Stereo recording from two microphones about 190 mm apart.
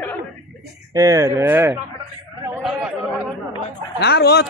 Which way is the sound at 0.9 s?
20° right (ahead or behind).